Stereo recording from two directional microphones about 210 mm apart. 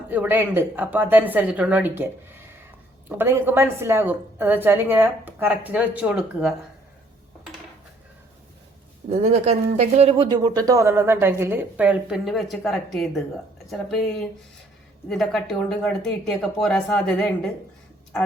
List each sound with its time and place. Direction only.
0.1 s speech: 10° right (ahead or behind)
3.1 s speech: 10° right (ahead or behind)
9.0 s speech: 40° right (ahead or behind); by 17.5 s centre (ahead or behind)